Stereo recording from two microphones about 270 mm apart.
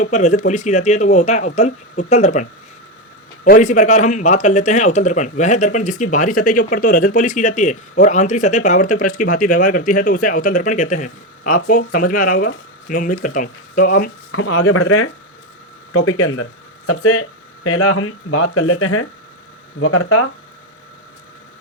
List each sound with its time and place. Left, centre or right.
0.0 s speech: left
14.3 s speech: left